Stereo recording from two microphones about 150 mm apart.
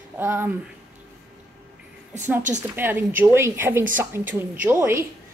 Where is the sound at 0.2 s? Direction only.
15° right (ahead or behind).